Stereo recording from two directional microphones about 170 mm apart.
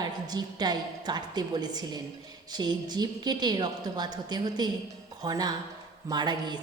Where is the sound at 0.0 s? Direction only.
25° right (ahead or behind).